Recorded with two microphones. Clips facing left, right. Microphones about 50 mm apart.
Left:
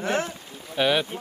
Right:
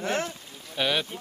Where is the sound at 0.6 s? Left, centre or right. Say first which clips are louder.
Left 4 dB; centre.